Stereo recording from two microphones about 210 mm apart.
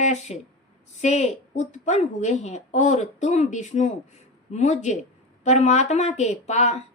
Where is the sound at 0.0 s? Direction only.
35° left (ahead or behind).